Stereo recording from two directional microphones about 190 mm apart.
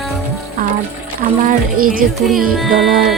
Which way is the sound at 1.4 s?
50° right (ahead or behind).